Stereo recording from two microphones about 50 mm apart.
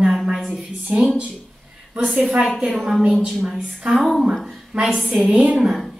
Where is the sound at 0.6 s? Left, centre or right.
Right.